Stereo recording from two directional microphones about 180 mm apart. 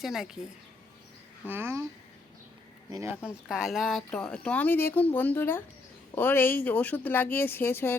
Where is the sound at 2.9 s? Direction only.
15° right (ahead or behind).